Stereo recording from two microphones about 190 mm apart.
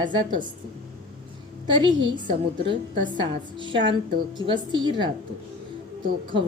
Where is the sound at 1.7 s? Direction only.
25° right (ahead or behind).